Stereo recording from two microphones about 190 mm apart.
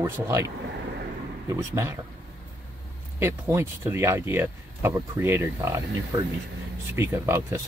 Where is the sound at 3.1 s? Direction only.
10° right (ahead or behind).